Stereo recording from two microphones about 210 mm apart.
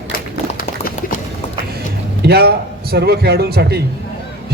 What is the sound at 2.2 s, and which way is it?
A man's voice, 50° right (ahead or behind).